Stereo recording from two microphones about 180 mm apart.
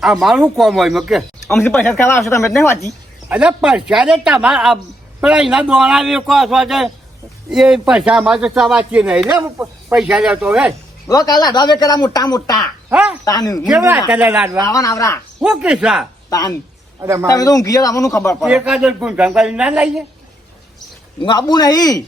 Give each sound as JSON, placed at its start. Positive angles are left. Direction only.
{"t": 0.0, "sound": "a man's voice", "side_deg": 0}
{"t": 1.5, "sound": "speech", "side_deg": 10}
{"t": 3.2, "sound": "a man's voice", "side_deg": -5}
{"t": 11.1, "sound": "speech", "side_deg": 20}
{"t": 12.9, "sound": "speech", "side_deg": -5}
{"t": 13.2, "sound": "speech", "side_deg": 20}
{"t": 13.7, "sound": "speech", "side_deg": -5}
{"t": 14.6, "sound": "speech", "side_deg": 20}
{"t": 15.4, "sound": "a man's voice", "side_deg": -5}
{"t": 17.0, "sound": "speech", "side_deg": -15}
{"t": 17.2, "sound": "speech", "side_deg": 20}
{"t": 18.3, "sound": "a man's voice", "side_deg": -5}
{"t": 21.2, "sound": "speech", "side_deg": 25}